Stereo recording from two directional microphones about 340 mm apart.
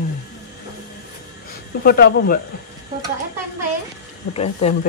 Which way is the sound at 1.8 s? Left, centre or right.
Left.